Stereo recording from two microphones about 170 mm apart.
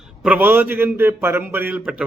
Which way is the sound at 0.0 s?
5° right (ahead or behind).